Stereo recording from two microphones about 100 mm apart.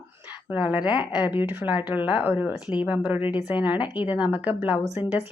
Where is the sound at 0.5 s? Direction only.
15° right (ahead or behind).